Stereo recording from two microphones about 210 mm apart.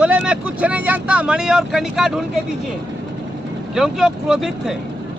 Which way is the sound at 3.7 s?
Centre (ahead or behind).